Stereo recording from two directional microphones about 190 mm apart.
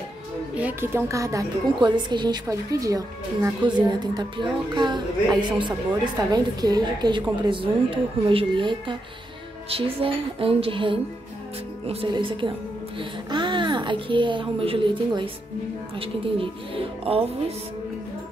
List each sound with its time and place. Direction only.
0.6 s a woman's voice: 10° right (ahead or behind); by 17.3 s 30° right (ahead or behind)